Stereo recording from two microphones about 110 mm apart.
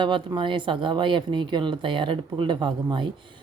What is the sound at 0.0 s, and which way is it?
A woman's voice, 45° right (ahead or behind).